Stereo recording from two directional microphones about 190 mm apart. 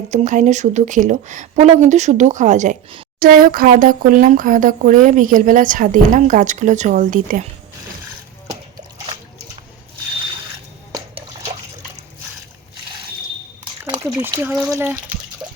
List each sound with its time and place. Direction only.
0.1 s speech: 40° right (ahead or behind)
10.9 s water: 30° right (ahead or behind)
14.0 s speech: 10° right (ahead or behind)